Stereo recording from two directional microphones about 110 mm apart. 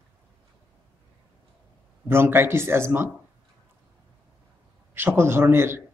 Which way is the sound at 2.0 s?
20° right (ahead or behind).